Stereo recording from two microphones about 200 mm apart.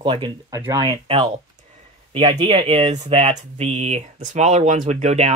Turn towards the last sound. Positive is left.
turn(degrees=-35)  # may be behind; listen again after turning